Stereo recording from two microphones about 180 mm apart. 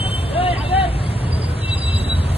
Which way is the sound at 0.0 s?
30° left (ahead or behind).